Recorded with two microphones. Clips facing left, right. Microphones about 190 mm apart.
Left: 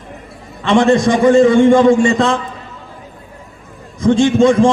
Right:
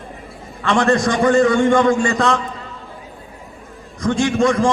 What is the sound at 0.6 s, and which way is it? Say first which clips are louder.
A man's voice: left 5 dB; 25° left (ahead or behind).